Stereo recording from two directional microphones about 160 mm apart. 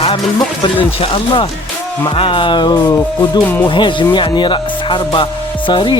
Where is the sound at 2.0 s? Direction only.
30° left (ahead or behind).